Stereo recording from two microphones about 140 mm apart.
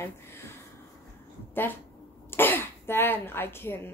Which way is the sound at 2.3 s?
15° left (ahead or behind).